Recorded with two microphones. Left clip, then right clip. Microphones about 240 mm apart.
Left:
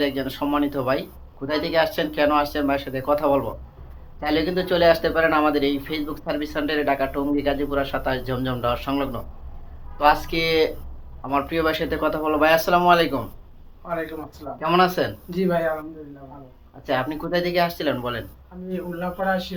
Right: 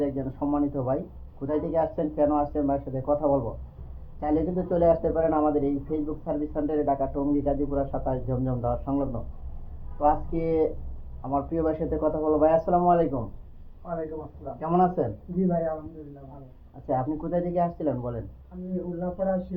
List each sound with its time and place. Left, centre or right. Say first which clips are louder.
0.0 s speech: left 5 dB; left
14.4 s speech: left 5 dB; left
16.8 s speech: left 4 dB; left